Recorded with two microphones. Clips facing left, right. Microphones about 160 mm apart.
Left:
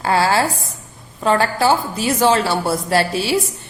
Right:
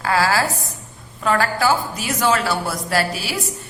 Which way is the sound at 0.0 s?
30° left (ahead or behind).